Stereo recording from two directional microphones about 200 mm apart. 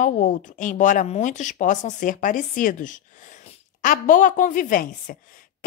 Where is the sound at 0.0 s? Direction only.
40° left (ahead or behind).